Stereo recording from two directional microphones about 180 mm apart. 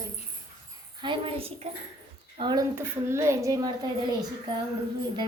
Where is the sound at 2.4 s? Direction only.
20° right (ahead or behind).